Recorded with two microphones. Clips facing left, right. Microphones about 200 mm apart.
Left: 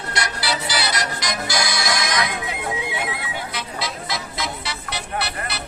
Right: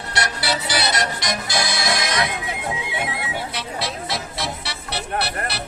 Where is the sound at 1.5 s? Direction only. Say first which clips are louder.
Even; 25° right (ahead or behind).